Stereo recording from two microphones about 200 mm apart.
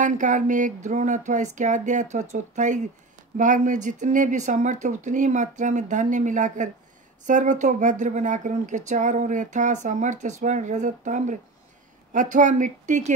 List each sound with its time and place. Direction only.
0.0 s speech: 40° right (ahead or behind)